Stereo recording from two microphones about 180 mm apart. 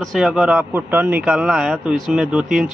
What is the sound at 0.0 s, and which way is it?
Speech, centre (ahead or behind).